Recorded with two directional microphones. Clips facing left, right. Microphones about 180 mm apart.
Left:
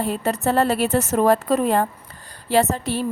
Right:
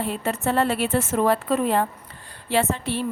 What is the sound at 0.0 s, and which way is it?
A woman's voice, 40° left (ahead or behind).